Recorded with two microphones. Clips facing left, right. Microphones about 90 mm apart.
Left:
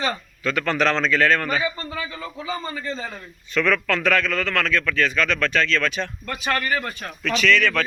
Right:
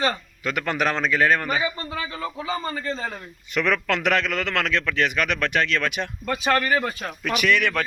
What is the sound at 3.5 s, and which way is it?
A man's voice, 20° right (ahead or behind).